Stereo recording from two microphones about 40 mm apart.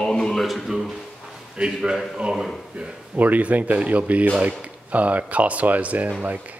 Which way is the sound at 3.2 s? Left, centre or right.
Right.